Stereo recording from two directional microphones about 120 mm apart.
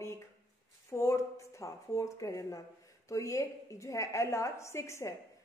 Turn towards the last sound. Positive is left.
turn(degrees=25)  # may be behind; listen again after turning